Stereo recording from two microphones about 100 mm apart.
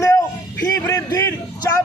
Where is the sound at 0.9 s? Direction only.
30° left (ahead or behind).